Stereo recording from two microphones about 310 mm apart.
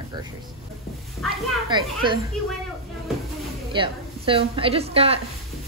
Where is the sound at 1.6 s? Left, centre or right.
Centre.